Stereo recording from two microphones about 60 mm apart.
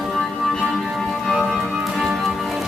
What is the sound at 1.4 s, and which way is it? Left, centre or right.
Music, centre.